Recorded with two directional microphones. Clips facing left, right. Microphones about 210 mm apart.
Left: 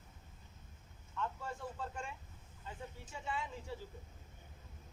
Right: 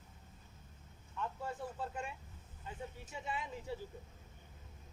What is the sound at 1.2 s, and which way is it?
Speech, 15° right (ahead or behind).